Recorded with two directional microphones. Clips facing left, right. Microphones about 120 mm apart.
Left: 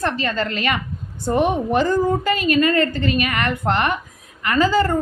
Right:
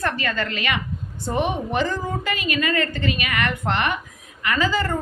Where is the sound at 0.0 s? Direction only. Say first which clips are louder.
Left 3 dB; 30° left (ahead or behind).